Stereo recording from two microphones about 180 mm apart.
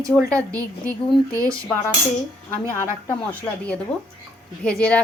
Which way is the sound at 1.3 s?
20° right (ahead or behind).